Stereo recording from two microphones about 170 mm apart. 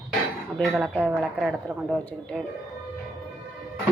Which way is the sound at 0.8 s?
10° right (ahead or behind).